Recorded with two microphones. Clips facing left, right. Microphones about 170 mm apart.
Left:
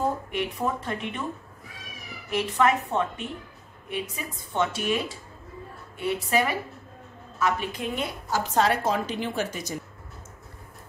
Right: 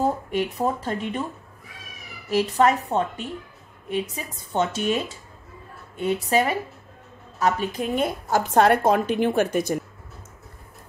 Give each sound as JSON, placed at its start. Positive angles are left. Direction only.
{"t": 0.3, "sound": "a woman's voice", "side_deg": -35}
{"t": 2.3, "sound": "a woman's voice", "side_deg": -35}
{"t": 5.9, "sound": "a woman's voice", "side_deg": -35}